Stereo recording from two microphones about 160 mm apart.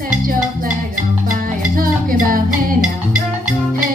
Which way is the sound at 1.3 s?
60° right (ahead or behind).